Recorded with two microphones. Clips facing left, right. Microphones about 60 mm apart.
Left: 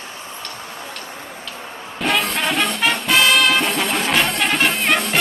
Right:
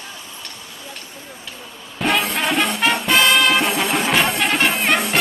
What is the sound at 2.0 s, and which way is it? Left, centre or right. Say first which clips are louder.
Music: even; centre.